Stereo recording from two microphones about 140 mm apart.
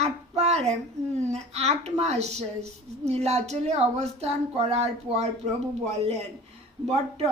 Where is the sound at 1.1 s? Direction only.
50° right (ahead or behind).